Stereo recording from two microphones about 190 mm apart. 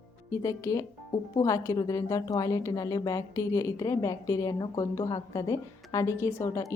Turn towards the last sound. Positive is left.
turn(degrees=15)  # may be behind; listen again after turning